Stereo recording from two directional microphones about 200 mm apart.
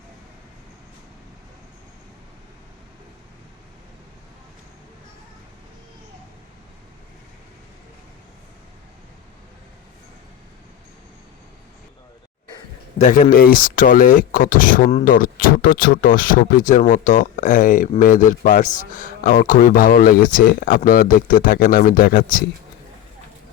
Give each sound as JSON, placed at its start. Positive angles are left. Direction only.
{"t": 13.0, "sound": "a man's voice", "side_deg": 35}